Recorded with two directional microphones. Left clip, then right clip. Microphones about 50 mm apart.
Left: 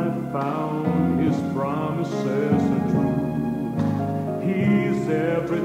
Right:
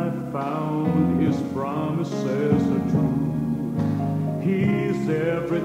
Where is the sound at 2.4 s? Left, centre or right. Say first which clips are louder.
Even; centre.